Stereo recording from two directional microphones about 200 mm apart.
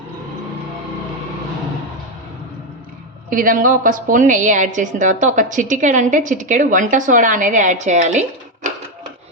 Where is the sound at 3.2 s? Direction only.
45° right (ahead or behind).